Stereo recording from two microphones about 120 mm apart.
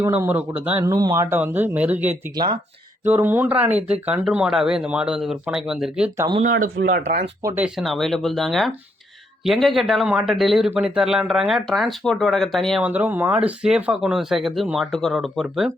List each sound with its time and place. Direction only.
0.1 s speech: 15° right (ahead or behind)
0.9 s speech: 30° right (ahead or behind)
2.3 s speech: 35° right (ahead or behind)
3.0 s speech: 15° right (ahead or behind)
6.4 s speech: 90° right
7.8 s speech: centre (ahead or behind)
12.8 s speech: 15° right (ahead or behind)